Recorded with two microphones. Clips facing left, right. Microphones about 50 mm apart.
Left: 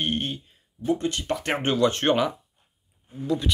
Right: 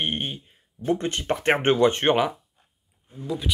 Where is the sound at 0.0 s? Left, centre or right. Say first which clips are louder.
Left 1 dB; centre.